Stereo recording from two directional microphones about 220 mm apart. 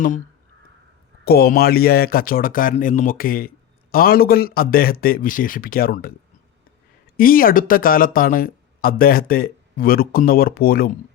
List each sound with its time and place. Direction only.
1.2 s speech: 45° left (ahead or behind)
7.2 s speech: 40° left (ahead or behind)